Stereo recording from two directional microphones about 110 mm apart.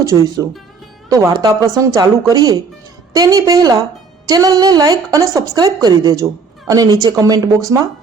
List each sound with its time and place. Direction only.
0.0 s speech: 30° right (ahead or behind)